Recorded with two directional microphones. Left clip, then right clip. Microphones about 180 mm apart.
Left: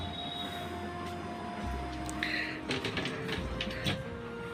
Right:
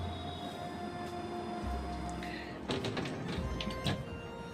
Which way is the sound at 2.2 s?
20° right (ahead or behind).